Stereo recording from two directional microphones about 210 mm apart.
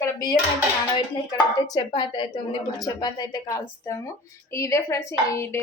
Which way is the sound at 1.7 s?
20° left (ahead or behind).